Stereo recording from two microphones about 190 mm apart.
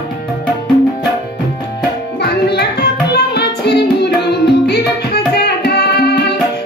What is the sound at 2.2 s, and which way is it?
Music, 60° left (ahead or behind).